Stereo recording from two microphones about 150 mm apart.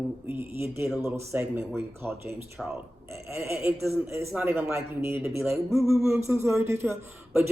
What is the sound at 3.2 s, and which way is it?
Speech, 20° right (ahead or behind).